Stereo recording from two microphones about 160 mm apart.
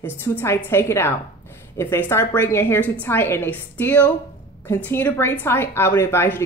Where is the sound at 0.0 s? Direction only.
15° left (ahead or behind).